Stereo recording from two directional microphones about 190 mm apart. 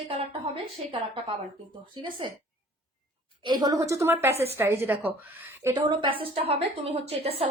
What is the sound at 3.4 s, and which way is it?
A woman's voice, 20° right (ahead or behind).